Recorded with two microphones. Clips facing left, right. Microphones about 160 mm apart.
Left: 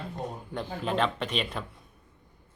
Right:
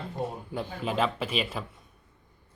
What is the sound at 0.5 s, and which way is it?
Speech, 5° right (ahead or behind).